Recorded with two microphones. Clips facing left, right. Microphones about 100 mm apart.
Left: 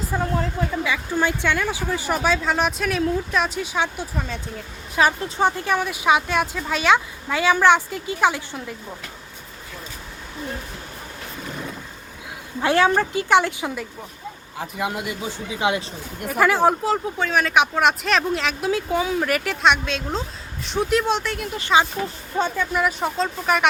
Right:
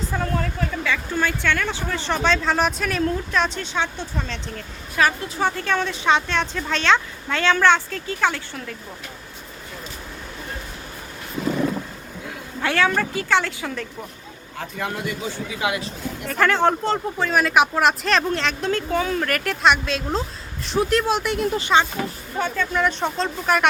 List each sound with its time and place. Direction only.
0.1 s speech: 20° left (ahead or behind)
12.6 s speech: 20° left (ahead or behind)
16.2 s speech: 10° left (ahead or behind)
22.4 s speech: 15° left (ahead or behind)